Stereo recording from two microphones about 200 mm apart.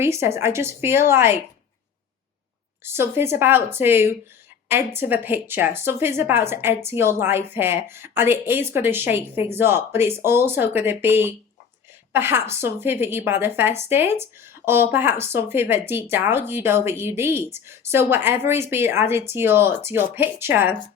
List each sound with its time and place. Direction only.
0.0 s speech: 15° right (ahead or behind)
2.8 s a woman's voice: 10° right (ahead or behind)